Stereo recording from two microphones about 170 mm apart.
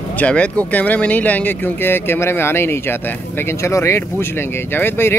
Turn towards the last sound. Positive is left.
turn(degrees=15)  # may be behind; listen again after turning